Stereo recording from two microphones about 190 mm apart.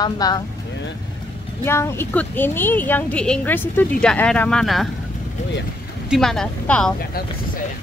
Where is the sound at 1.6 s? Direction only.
15° left (ahead or behind).